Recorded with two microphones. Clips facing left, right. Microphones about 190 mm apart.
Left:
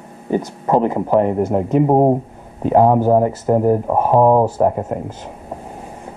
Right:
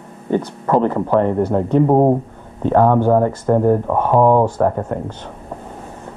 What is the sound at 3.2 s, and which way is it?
Speech, 10° left (ahead or behind).